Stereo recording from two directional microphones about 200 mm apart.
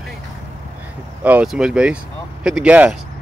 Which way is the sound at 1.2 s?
5° right (ahead or behind).